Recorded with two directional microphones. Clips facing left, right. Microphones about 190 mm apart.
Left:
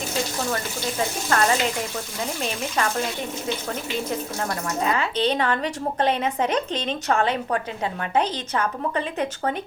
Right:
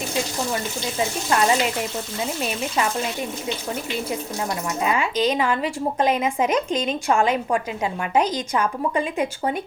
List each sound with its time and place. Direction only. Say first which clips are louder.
0.5 s a woman's voice: right 1 dB; 15° right (ahead or behind)
4.8 s a woman's voice: right 1 dB; 15° right (ahead or behind)
5.1 s a woman's voice: right 2 dB; 30° left (ahead or behind)
5.4 s a woman's voice: right 2 dB; 10° right (ahead or behind)